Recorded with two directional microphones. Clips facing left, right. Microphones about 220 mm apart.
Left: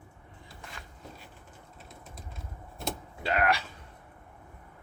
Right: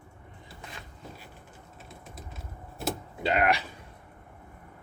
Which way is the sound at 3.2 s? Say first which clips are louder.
Right 2 dB; 20° right (ahead or behind).